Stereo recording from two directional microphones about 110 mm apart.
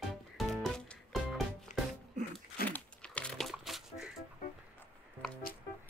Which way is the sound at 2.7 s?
10° left (ahead or behind).